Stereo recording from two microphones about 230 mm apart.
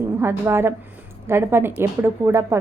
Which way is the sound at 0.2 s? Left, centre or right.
Centre.